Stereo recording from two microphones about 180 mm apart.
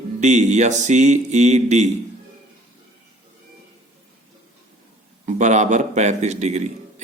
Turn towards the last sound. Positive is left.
turn(degrees=-40)  # may be behind; listen again after turning